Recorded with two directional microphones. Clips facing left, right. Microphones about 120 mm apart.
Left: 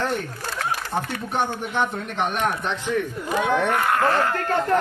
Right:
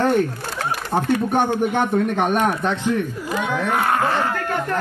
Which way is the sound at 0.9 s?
50° right (ahead or behind).